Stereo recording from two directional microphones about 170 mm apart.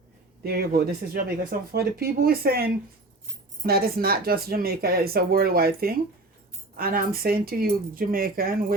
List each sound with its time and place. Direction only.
0.4 s speech: 65° right (ahead or behind)